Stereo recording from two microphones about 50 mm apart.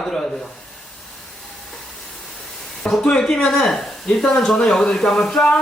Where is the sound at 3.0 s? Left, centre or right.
Centre.